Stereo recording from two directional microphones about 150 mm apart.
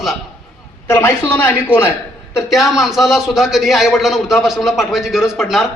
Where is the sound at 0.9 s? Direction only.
15° left (ahead or behind).